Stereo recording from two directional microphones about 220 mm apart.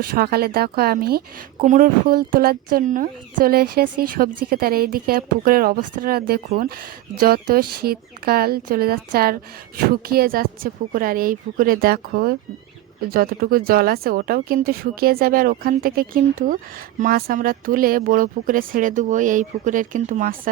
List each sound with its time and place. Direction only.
0.0 s a woman's voice: 45° right (ahead or behind)